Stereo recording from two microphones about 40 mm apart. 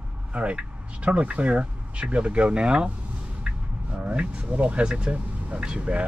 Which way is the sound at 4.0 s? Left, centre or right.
Right.